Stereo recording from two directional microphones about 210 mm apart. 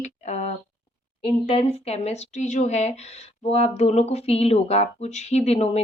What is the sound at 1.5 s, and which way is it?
Speech, 30° left (ahead or behind).